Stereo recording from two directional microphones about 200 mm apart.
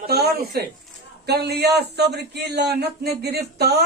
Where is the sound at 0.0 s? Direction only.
50° right (ahead or behind).